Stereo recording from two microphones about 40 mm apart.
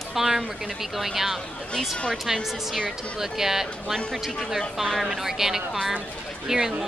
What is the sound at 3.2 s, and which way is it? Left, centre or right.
Speech, centre.